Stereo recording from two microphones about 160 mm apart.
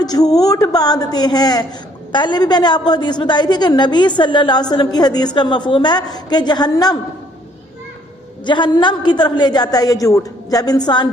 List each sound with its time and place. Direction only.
0.0 s a woman's voice: 25° left (ahead or behind)
8.4 s a woman's voice: 30° left (ahead or behind)